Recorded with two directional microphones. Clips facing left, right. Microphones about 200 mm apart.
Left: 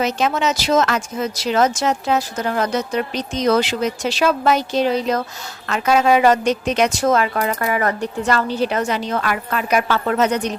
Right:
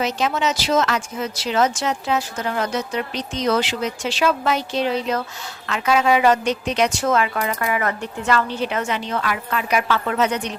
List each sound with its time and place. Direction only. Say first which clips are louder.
0.0 s a woman's voice: left 2 dB; 50° left (ahead or behind)